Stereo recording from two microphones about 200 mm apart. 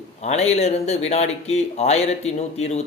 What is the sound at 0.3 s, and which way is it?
Speech, 35° left (ahead or behind).